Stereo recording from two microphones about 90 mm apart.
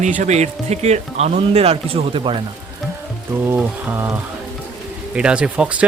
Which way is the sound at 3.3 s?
25° right (ahead or behind).